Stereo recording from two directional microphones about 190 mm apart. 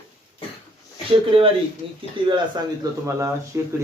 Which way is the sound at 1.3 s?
30° right (ahead or behind).